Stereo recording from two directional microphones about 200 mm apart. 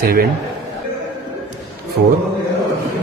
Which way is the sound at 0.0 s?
50° right (ahead or behind).